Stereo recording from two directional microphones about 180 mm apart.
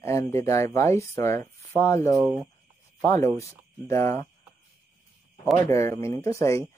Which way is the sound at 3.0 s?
15° left (ahead or behind).